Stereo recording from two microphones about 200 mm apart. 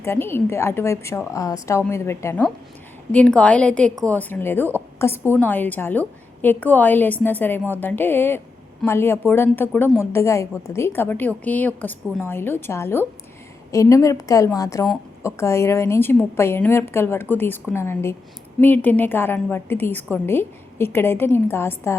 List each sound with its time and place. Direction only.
0.0 s a woman's voice: 10° left (ahead or behind)